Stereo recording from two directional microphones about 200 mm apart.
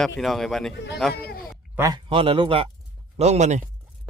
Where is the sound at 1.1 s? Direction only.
50° left (ahead or behind).